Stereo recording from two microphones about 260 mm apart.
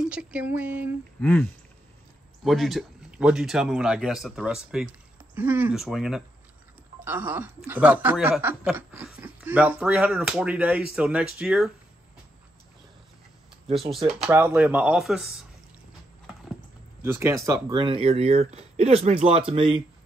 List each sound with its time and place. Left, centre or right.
0.0 s speech: centre
1.2 s a sound: centre
2.4 s speech: centre
14.0 s speech: centre
17.0 s speech: centre